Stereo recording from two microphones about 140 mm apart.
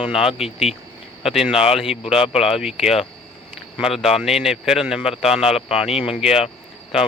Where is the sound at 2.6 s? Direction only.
5° right (ahead or behind).